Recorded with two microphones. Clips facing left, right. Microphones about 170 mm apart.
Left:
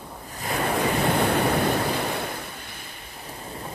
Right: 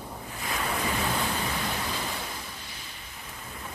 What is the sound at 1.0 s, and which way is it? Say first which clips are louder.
Waves: left 8 dB; 65° left (ahead or behind).